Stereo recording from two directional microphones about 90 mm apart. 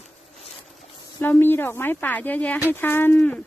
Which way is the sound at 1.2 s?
25° left (ahead or behind).